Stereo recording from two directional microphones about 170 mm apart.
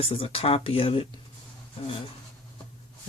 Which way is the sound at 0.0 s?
35° left (ahead or behind).